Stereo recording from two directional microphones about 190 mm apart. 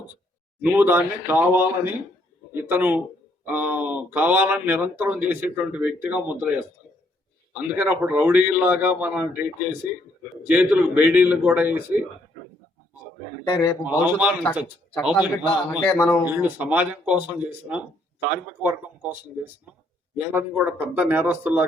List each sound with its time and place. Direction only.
0.6 s speech: 10° right (ahead or behind)
13.5 s speech: 15° left (ahead or behind)
13.8 s speech: 5° right (ahead or behind)
15.9 s speech: 10° left (ahead or behind)
16.4 s speech: 10° right (ahead or behind)
20.1 s speech: 10° right (ahead or behind)